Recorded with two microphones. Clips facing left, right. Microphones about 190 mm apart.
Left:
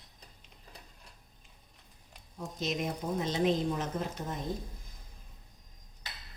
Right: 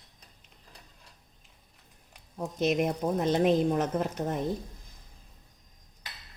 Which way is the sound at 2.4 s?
60° right (ahead or behind).